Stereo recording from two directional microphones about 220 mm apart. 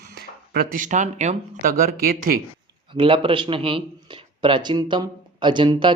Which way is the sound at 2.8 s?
25° right (ahead or behind).